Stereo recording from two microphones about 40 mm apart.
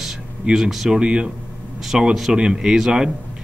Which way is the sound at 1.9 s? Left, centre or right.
Centre.